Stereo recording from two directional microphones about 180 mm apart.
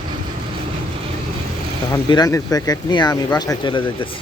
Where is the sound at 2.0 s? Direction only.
20° left (ahead or behind).